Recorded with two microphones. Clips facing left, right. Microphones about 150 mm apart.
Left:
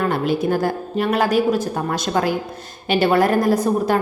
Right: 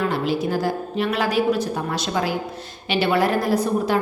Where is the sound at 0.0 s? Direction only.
50° left (ahead or behind).